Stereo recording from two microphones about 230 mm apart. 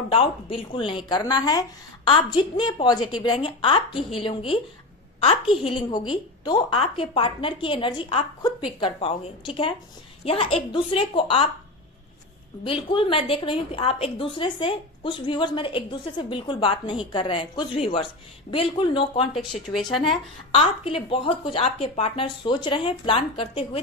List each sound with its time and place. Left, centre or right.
0.1 s a woman's voice: left
12.6 s a woman's voice: left
19.3 s speech: centre
20.5 s a woman's voice: left